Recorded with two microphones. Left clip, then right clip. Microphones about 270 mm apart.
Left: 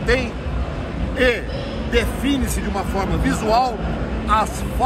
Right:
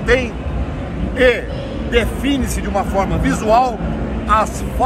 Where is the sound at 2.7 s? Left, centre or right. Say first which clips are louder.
Right 7 dB; centre.